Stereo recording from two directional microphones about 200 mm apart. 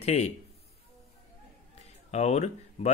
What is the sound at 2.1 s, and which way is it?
Speech, 35° left (ahead or behind).